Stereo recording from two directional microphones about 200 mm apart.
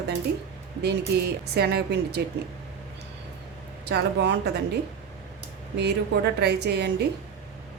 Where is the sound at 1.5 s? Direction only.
55° right (ahead or behind).